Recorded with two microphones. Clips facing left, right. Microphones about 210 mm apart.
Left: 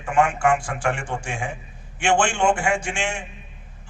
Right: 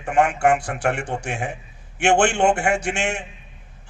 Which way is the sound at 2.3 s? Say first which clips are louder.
Right 2 dB; 40° right (ahead or behind).